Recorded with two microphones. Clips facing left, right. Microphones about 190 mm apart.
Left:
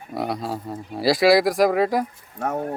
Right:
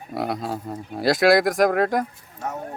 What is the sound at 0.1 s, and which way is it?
A man's voice, centre (ahead or behind).